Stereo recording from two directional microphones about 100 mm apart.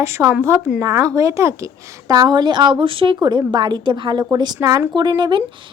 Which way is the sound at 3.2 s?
45° right (ahead or behind).